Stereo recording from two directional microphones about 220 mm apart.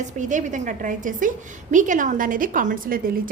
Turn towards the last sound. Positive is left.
turn(degrees=-40)  # may be behind; listen again after turning